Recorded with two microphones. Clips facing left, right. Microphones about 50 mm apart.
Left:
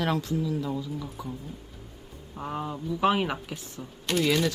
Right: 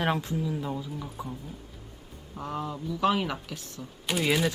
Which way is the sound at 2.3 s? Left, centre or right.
Centre.